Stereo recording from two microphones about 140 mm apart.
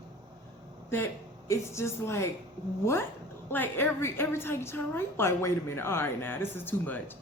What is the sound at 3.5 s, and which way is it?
Speech, 15° left (ahead or behind).